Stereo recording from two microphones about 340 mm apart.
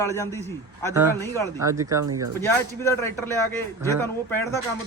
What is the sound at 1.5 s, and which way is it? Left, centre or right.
Speech, centre.